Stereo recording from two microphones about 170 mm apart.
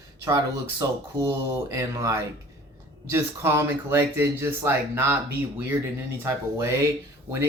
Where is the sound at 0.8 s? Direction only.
20° right (ahead or behind).